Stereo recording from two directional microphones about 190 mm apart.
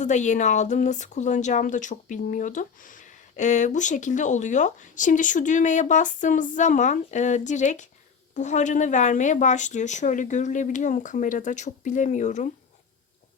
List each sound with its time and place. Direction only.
0.0 s a woman's voice: 40° left (ahead or behind)